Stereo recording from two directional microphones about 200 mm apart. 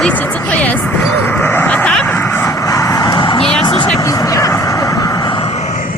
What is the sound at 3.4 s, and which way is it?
Music, 5° left (ahead or behind).